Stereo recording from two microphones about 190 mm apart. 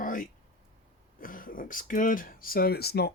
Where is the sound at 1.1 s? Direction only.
45° left (ahead or behind).